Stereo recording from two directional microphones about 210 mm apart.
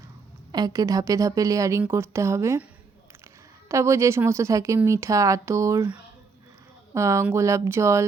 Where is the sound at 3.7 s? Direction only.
15° right (ahead or behind).